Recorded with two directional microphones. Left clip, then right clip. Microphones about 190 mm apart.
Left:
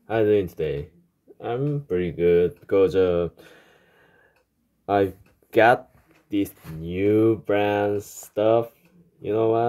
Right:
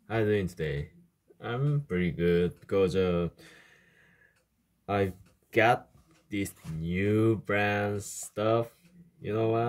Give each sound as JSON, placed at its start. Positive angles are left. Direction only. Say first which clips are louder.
{"t": 0.0, "sound": "speech", "louder": "left 8 dB", "side_deg": -10}
{"t": 4.8, "sound": "speech", "louder": "left 8 dB", "side_deg": -10}
{"t": 6.2, "sound": "speech", "louder": "left 9 dB", "side_deg": -10}